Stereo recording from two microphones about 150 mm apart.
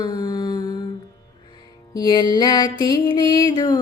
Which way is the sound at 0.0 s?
30° left (ahead or behind).